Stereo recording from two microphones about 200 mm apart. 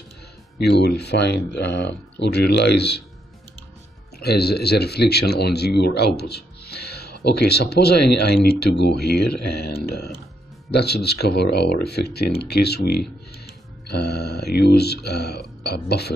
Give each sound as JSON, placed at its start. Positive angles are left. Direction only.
{"t": 0.6, "sound": "speech", "side_deg": 55}
{"t": 4.2, "sound": "speech", "side_deg": 55}